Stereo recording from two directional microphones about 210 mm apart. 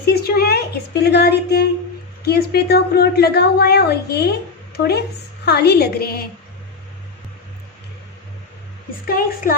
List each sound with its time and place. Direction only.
0.0 s a woman's voice: 45° left (ahead or behind)
9.0 s speech: 45° left (ahead or behind)